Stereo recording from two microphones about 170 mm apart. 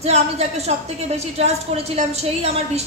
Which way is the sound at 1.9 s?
40° right (ahead or behind).